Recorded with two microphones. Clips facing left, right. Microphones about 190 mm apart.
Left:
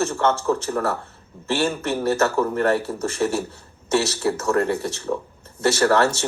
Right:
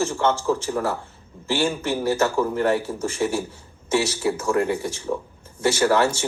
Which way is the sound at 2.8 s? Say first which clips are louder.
Left 1 dB; 65° left (ahead or behind).